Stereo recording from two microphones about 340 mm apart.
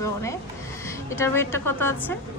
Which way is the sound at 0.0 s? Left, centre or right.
Centre.